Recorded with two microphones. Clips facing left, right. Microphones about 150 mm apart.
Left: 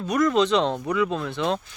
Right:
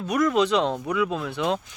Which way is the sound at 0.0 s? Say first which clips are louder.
Left 1 dB; 5° right (ahead or behind).